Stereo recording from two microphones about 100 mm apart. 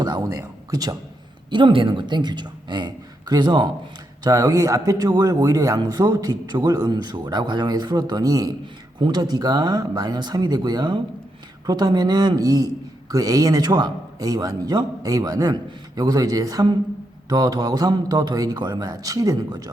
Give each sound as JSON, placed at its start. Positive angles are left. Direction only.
{"t": 0.0, "sound": "speech", "side_deg": -40}
{"t": 1.5, "sound": "speech", "side_deg": -55}